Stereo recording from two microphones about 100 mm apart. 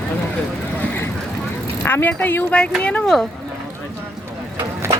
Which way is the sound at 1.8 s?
20° left (ahead or behind).